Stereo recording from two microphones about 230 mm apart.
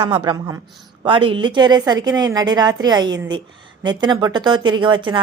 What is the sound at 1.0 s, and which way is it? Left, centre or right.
A woman's voice, right.